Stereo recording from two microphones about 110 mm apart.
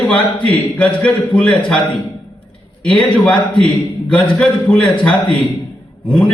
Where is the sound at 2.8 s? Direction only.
10° left (ahead or behind).